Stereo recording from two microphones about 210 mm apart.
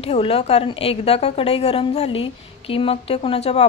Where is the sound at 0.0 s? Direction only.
30° left (ahead or behind).